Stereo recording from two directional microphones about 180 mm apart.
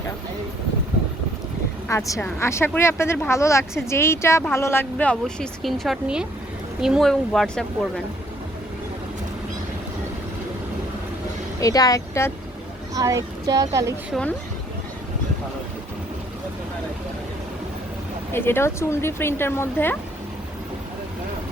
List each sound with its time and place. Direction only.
1.9 s speech: 15° left (ahead or behind)
11.6 s speech: 20° left (ahead or behind)
12.9 s speech: 20° right (ahead or behind)
18.3 s speech: 10° left (ahead or behind)